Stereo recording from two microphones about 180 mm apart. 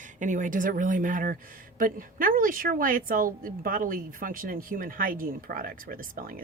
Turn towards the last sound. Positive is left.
turn(degrees=-50)  # may be behind; listen again after turning